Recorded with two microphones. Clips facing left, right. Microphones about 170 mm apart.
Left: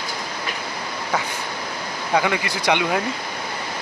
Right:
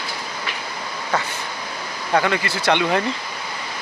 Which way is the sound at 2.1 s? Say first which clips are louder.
Right 1 dB; 10° left (ahead or behind).